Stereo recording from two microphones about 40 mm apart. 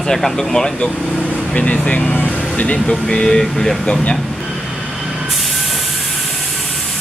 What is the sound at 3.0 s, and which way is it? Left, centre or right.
Speech, centre.